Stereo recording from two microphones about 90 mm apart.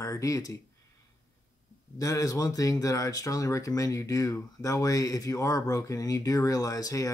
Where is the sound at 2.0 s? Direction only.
40° left (ahead or behind).